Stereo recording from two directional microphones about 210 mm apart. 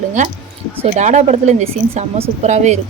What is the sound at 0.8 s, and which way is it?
Speech, 30° right (ahead or behind).